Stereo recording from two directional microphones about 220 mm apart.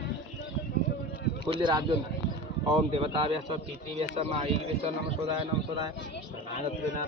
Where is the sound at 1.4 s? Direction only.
20° right (ahead or behind).